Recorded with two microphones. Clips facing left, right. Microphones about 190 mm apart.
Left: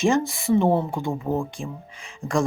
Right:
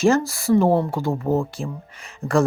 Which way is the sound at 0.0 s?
Centre (ahead or behind).